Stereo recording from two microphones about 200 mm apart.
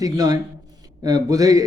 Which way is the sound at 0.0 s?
20° right (ahead or behind).